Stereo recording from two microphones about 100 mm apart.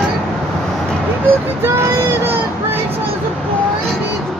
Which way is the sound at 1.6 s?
25° right (ahead or behind).